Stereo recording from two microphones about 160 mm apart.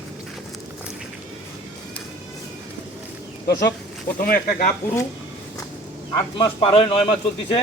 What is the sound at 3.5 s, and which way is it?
Speech, 90° left.